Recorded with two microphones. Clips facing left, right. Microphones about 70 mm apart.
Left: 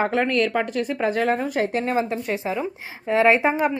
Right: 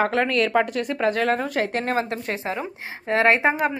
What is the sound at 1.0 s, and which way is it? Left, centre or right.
Speech, centre.